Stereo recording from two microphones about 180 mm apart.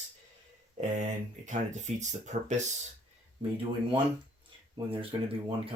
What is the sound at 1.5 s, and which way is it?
Speech, 40° right (ahead or behind).